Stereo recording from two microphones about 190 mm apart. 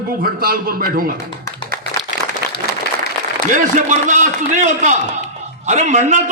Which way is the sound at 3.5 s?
40° right (ahead or behind).